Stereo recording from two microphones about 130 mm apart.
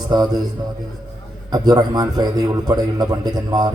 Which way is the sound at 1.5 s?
30° right (ahead or behind).